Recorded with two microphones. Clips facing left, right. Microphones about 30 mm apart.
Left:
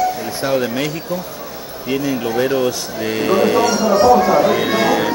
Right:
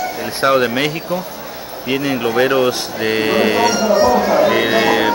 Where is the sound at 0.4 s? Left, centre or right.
Right.